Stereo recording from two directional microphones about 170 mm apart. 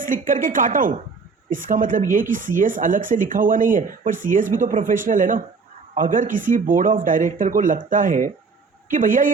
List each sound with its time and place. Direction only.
0.0 s speech: 50° right (ahead or behind)